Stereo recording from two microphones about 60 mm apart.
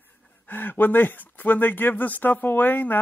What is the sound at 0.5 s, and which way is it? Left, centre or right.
Speech, left.